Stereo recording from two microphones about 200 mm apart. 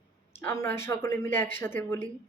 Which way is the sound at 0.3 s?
15° left (ahead or behind).